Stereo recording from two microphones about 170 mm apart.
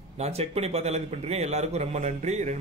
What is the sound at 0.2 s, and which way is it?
A man's voice, 40° right (ahead or behind).